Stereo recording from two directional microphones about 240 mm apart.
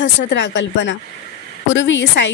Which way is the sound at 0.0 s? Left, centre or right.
Left.